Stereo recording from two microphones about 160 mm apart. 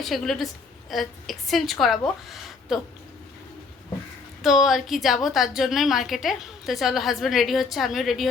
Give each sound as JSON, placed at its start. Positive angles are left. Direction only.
{"t": 0.0, "sound": "a woman's voice", "side_deg": 0}
{"t": 4.4, "sound": "a woman's voice", "side_deg": 0}